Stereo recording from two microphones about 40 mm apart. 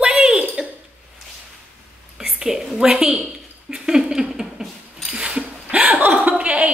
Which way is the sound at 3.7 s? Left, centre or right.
Centre.